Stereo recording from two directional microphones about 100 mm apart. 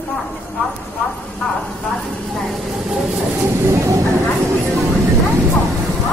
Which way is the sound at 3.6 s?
30° right (ahead or behind).